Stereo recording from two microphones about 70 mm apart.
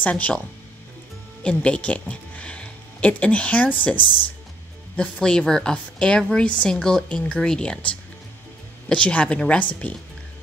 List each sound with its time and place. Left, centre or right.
0.0 s a woman's voice: centre
1.4 s speech: centre
4.9 s a woman's voice: centre